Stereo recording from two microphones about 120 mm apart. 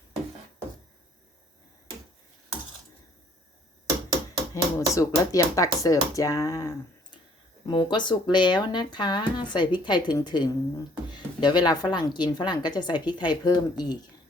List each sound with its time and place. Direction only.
4.5 s speech: 30° left (ahead or behind)
7.7 s a woman's voice: 35° left (ahead or behind)